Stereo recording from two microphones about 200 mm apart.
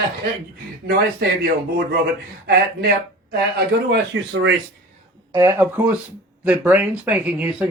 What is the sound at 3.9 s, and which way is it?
Speech, 60° right (ahead or behind).